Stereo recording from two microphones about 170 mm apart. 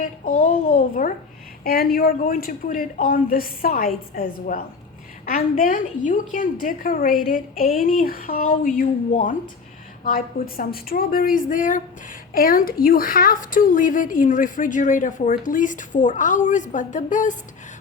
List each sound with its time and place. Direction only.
0.0 s a woman's voice: 45° left (ahead or behind)
1.6 s a woman's voice: 60° left (ahead or behind)